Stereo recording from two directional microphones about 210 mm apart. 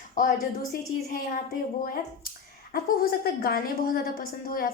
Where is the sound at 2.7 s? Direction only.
45° left (ahead or behind).